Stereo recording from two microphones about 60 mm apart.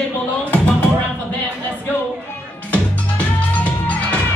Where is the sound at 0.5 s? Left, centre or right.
Left.